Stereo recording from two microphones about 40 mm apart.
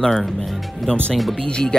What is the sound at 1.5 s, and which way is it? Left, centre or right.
Speech, left.